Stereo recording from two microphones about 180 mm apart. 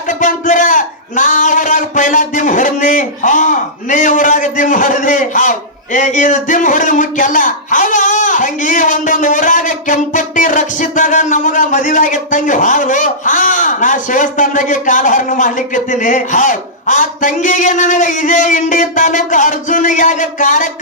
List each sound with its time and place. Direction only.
0.1 s a man's voice: 45° left (ahead or behind)